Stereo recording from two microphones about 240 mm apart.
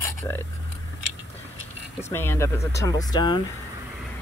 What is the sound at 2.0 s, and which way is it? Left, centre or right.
Speech, centre.